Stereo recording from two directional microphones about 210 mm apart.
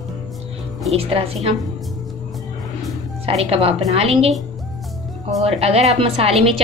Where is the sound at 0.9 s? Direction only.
30° right (ahead or behind).